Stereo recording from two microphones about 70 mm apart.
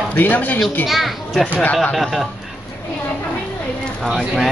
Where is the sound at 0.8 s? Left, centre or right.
Centre.